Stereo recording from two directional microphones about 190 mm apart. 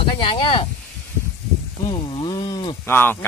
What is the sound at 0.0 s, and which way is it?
Speech, 25° left (ahead or behind).